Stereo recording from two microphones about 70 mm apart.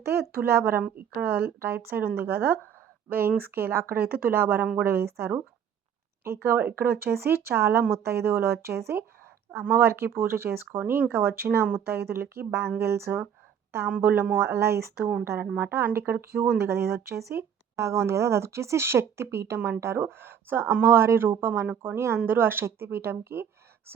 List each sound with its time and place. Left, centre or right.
0.0 s speech: right
0.8 s speech: right